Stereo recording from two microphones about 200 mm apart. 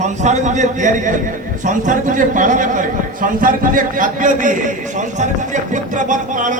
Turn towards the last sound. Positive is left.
turn(degrees=-40)  # may be behind; listen again after turning